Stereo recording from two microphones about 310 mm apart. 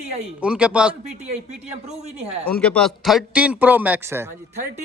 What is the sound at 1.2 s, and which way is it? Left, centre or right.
A man's voice, right.